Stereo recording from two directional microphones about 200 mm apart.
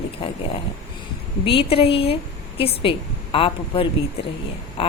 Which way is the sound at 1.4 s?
25° left (ahead or behind).